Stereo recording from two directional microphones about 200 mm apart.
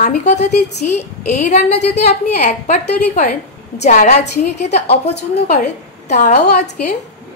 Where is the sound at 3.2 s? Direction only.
50° left (ahead or behind).